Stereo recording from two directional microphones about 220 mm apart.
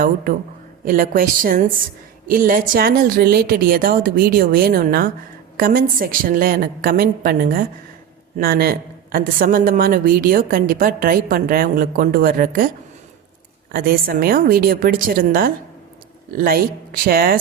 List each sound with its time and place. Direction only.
0.9 s a woman's voice: 40° right (ahead or behind)
13.7 s a woman's voice: 40° right (ahead or behind)